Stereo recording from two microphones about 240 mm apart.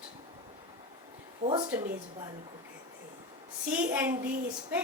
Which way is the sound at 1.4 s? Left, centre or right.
Right.